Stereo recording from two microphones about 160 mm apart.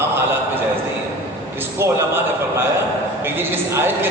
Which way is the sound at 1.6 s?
15° right (ahead or behind).